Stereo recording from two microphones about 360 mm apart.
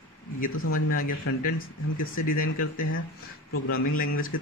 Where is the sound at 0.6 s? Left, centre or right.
Left.